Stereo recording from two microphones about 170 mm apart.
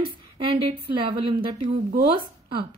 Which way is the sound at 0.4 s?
30° right (ahead or behind).